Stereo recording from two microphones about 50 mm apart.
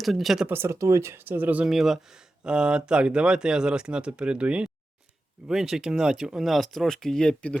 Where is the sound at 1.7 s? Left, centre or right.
Centre.